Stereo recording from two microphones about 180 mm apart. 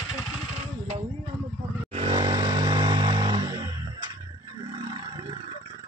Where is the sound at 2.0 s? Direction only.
25° right (ahead or behind).